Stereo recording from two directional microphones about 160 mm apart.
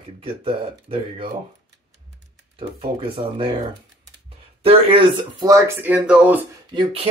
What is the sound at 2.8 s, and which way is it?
Speech, 35° right (ahead or behind).